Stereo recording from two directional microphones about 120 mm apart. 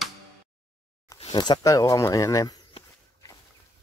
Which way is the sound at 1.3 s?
40° left (ahead or behind).